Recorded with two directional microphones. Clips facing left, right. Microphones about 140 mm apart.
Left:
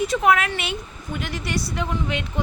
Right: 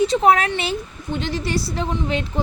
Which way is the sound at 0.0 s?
30° right (ahead or behind).